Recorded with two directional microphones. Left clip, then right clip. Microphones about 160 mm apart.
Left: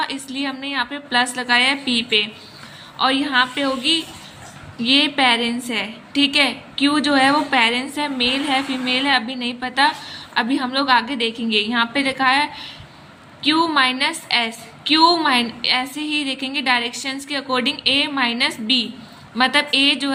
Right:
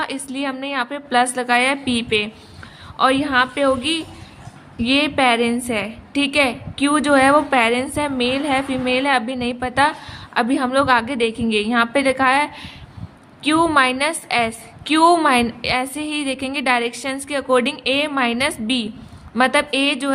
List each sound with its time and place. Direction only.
0.0 s a woman's voice: 50° right (ahead or behind)